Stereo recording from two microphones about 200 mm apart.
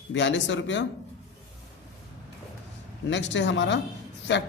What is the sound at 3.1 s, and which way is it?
Speech, 65° left (ahead or behind).